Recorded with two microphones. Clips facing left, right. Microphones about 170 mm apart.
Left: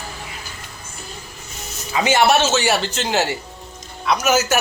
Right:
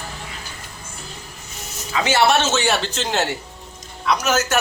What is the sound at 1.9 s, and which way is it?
Speech, 20° left (ahead or behind).